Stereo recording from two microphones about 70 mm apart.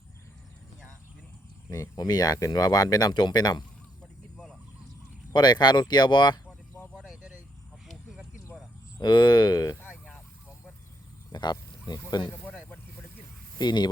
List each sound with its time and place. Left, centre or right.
1.7 s speech: left
5.3 s speech: left
6.9 s a sound: centre
7.2 s vehicle: centre
7.9 s a sound: centre
9.0 s speech: left
11.3 s speech: left
12.5 s a sound: left
13.6 s speech: left